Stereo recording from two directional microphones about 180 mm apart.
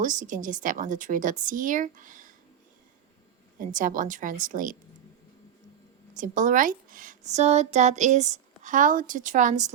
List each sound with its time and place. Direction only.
0.0 s speech: 45° right (ahead or behind)
3.6 s speech: 45° right (ahead or behind)
6.1 s a woman's voice: 45° right (ahead or behind)